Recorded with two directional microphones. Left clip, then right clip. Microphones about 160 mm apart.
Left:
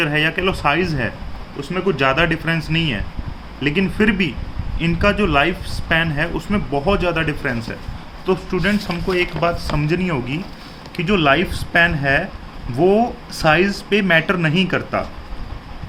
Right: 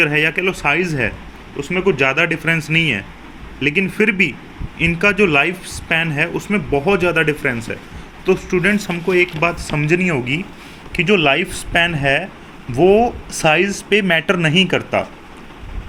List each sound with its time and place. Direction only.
0.0 s speech: 15° right (ahead or behind)